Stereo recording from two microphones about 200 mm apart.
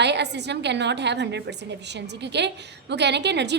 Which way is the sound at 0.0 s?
60° right (ahead or behind).